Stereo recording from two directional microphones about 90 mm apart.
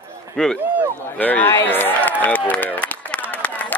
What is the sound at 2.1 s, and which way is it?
Run, 20° left (ahead or behind).